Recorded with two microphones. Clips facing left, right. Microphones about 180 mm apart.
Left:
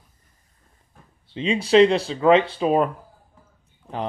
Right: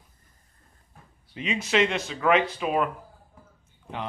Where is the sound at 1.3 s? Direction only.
30° left (ahead or behind).